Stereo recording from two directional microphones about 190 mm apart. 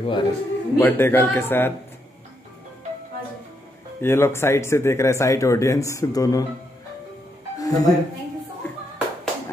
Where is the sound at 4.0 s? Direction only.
15° left (ahead or behind).